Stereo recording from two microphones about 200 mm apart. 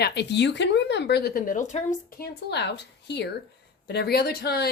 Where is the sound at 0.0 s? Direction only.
55° left (ahead or behind).